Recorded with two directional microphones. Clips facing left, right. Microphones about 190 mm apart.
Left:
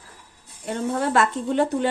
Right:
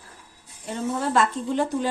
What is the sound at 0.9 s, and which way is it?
A woman's voice, 60° left (ahead or behind).